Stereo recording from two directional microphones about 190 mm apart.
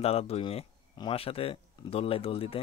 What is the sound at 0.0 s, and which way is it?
Speech, 30° left (ahead or behind).